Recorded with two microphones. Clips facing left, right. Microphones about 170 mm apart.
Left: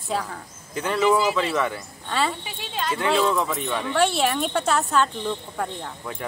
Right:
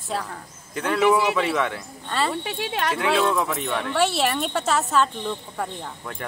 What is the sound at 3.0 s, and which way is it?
Speech, centre (ahead or behind).